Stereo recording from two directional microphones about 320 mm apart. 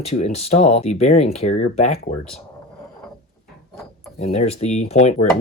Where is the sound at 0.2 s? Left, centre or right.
Centre.